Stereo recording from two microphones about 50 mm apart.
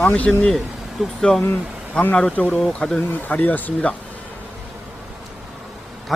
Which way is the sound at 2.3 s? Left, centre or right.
Left.